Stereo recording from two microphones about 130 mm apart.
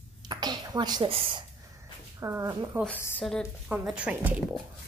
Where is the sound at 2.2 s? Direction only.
25° right (ahead or behind).